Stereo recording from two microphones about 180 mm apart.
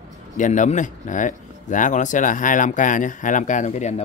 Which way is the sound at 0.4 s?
40° left (ahead or behind).